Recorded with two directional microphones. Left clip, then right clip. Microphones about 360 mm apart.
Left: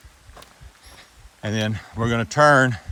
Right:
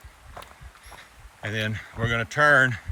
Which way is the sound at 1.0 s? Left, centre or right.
Centre.